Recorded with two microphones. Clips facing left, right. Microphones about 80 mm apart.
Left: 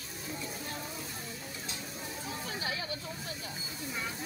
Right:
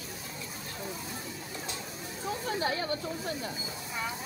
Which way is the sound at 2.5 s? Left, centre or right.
Right.